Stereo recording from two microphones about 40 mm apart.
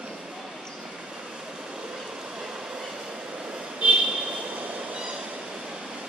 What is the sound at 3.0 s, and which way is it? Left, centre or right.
Train, right.